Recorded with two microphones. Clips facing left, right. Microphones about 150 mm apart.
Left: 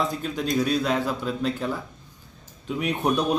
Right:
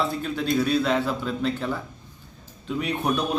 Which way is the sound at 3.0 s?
Centre (ahead or behind).